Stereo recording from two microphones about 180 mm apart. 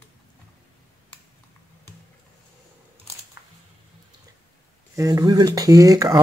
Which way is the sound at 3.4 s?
15° right (ahead or behind).